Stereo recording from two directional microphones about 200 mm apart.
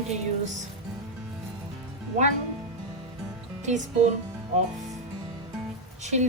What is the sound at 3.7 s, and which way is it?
Speech, 35° right (ahead or behind).